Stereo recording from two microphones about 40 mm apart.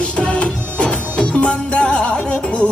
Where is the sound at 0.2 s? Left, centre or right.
Left.